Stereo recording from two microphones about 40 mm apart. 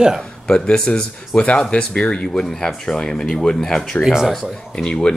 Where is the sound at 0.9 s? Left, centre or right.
Centre.